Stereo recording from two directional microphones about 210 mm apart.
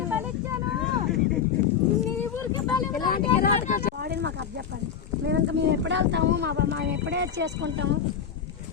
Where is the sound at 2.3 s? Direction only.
20° left (ahead or behind).